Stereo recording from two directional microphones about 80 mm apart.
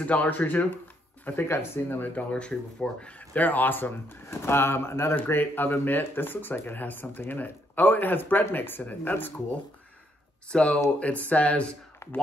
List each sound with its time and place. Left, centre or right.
0.0 s speech: centre
2.3 s speech: centre
12.0 s a sound: left